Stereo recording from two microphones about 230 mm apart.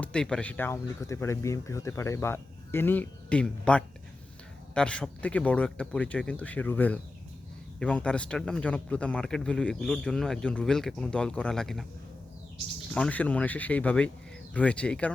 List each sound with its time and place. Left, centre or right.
0.0 s speech: centre
12.9 s speech: centre